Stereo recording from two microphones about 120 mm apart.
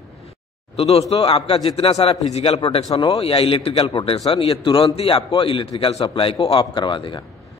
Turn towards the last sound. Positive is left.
turn(degrees=45)  # may be behind; listen again after turning